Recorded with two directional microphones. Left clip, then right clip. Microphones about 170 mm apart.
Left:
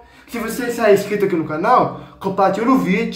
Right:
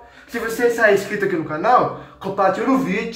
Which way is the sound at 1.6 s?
10° left (ahead or behind).